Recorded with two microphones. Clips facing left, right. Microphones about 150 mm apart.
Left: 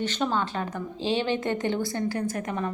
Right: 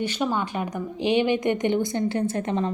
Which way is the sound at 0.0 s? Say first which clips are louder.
Right 1 dB; 10° right (ahead or behind).